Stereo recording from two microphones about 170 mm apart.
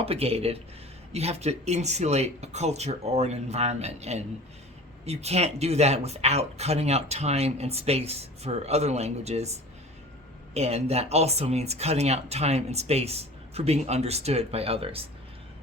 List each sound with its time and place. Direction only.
0.0 s speech: 35° right (ahead or behind)